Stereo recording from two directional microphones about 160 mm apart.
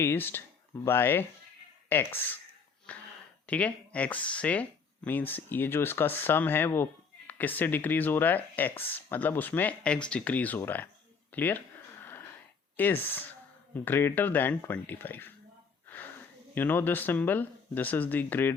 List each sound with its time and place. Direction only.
0.0 s speech: 15° left (ahead or behind)
2.9 s a sound: 10° left (ahead or behind)
3.4 s speech: 10° left (ahead or behind)
12.7 s speech: 10° left (ahead or behind)
16.6 s speech: 10° left (ahead or behind)